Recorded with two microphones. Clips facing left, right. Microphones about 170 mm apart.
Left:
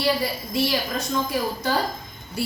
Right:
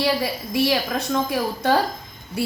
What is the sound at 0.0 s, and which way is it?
A woman's voice, 65° right (ahead or behind).